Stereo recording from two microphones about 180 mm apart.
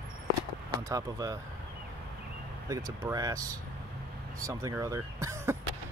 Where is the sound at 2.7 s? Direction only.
20° right (ahead or behind).